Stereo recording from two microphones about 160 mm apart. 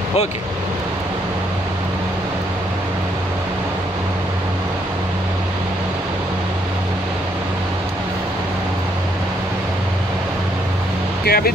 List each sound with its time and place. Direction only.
11.2 s speech: 70° left (ahead or behind)